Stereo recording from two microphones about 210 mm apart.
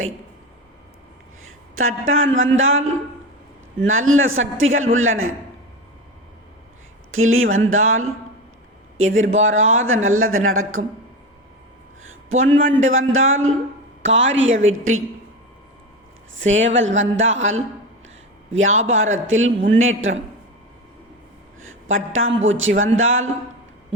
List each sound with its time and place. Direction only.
1.5 s a sound: 80° right
2.0 s speech: 70° right (ahead or behind)
7.1 s speech: 75° right (ahead or behind)
9.3 s speech: 65° right (ahead or behind)
12.4 s a woman's voice: 65° right (ahead or behind)
16.5 s a woman's voice: 65° right (ahead or behind)
21.6 s speech: 70° right (ahead or behind)